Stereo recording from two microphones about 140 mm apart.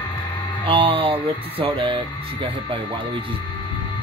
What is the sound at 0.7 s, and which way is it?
Speech, 40° right (ahead or behind).